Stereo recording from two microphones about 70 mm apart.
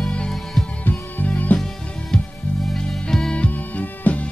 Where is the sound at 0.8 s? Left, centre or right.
Left.